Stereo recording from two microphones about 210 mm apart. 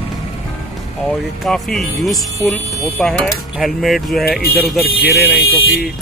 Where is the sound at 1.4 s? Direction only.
Centre (ahead or behind).